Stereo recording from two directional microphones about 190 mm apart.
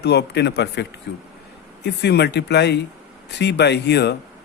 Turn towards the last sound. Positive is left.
turn(degrees=60)  # may be behind; listen again after turning